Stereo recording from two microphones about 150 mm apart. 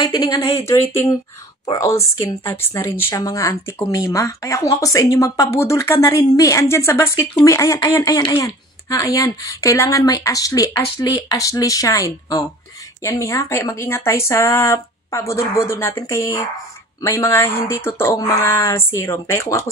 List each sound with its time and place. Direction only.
0.0 s speech: 30° left (ahead or behind)
0.6 s a woman's voice: 20° left (ahead or behind)